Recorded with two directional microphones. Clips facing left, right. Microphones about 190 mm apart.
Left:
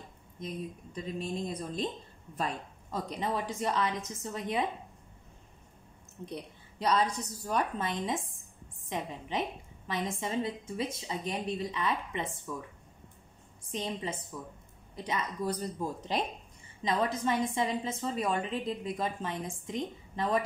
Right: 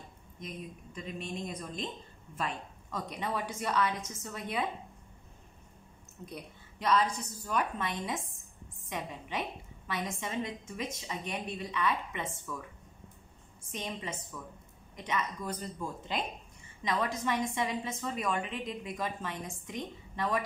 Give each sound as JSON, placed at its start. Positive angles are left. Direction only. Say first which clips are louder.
{"t": 0.9, "sound": "a woman's voice", "louder": "left 4 dB", "side_deg": 35}
{"t": 6.2, "sound": "a woman's voice", "louder": "left 4 dB", "side_deg": 30}
{"t": 13.7, "sound": "a woman's voice", "louder": "left 3 dB", "side_deg": 30}